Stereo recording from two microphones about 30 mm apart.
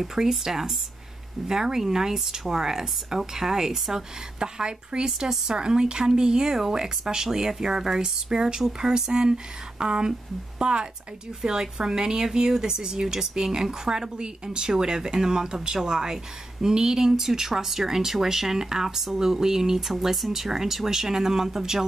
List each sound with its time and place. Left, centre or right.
0.0 s speech: centre
4.4 s speech: right
20.2 s speech: centre